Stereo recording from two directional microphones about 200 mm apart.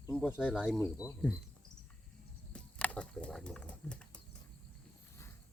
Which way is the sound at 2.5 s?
5° left (ahead or behind).